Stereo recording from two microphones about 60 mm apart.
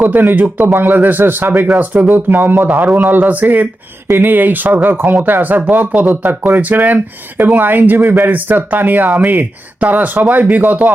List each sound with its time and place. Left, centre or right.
0.0 s a man's voice: right